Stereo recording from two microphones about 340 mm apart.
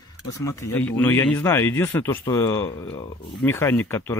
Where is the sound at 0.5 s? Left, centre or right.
Centre.